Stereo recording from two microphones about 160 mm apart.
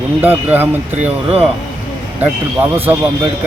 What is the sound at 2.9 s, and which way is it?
Speech, 10° right (ahead or behind).